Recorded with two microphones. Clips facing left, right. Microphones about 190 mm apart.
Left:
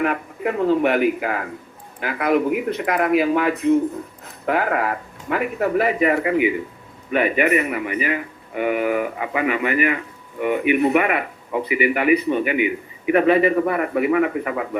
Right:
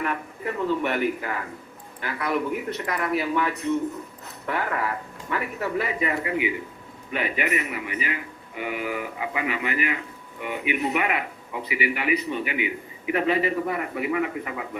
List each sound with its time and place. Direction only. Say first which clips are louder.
0.0 s a man's voice: left 7 dB; 80° left
0.8 s speech: left 7 dB; 90° left
2.3 s speech: left 8 dB; 85° left
4.4 s a man's voice: left 7 dB; 65° left (ahead or behind)